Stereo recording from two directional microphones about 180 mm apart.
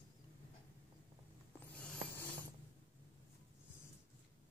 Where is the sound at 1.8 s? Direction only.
5° left (ahead or behind).